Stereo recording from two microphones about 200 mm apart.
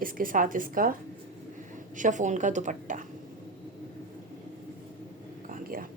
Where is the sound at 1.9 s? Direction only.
40° right (ahead or behind).